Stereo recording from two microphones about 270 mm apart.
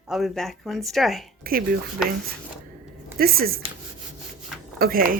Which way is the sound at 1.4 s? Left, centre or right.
Right.